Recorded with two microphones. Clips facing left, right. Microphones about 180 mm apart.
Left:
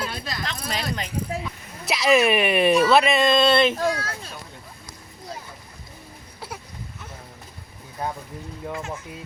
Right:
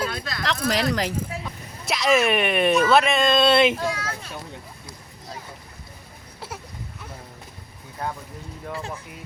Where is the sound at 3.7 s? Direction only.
40° left (ahead or behind).